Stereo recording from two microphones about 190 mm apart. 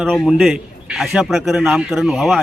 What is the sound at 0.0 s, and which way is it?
Speech, 5° right (ahead or behind).